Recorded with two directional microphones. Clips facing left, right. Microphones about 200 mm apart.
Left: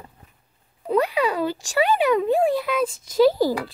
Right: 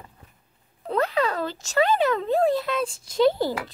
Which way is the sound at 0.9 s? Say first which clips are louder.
Left 3 dB; 10° left (ahead or behind).